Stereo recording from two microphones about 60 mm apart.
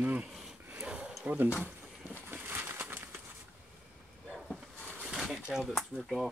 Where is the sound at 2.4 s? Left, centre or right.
Right.